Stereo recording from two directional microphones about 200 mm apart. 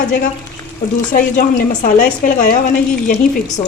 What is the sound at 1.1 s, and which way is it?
A woman's voice, 45° left (ahead or behind).